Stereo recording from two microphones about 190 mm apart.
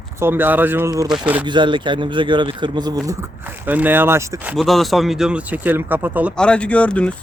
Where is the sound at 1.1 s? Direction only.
5° right (ahead or behind).